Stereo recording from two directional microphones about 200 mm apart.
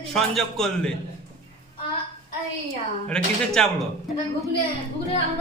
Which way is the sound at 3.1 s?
5° left (ahead or behind).